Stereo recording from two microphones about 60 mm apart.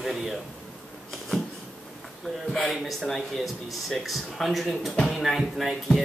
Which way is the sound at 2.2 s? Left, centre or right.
Centre.